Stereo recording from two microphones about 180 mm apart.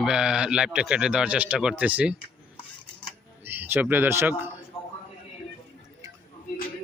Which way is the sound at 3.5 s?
10° right (ahead or behind).